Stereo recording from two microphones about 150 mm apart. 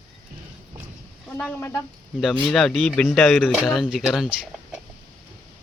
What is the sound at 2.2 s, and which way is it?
Speech, centre (ahead or behind).